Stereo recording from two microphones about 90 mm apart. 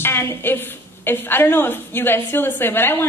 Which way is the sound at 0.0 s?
30° left (ahead or behind).